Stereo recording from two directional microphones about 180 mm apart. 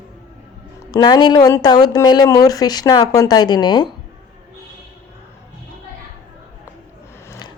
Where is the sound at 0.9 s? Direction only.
25° left (ahead or behind).